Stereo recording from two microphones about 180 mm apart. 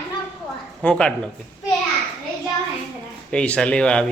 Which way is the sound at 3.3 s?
5° left (ahead or behind).